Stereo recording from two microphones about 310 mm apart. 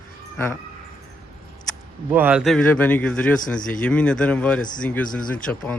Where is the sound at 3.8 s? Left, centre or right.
Centre.